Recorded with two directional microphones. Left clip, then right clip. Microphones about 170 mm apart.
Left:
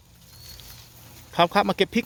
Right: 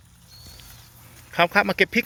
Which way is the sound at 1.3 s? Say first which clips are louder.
Right 1 dB; 25° left (ahead or behind).